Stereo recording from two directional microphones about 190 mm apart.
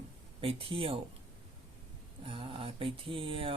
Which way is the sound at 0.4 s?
30° right (ahead or behind).